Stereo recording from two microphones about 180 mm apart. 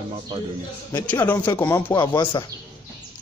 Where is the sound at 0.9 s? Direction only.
15° left (ahead or behind).